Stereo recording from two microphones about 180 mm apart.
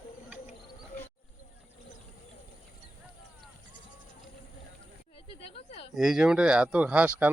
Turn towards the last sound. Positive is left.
turn(degrees=-10)  # may be behind; listen again after turning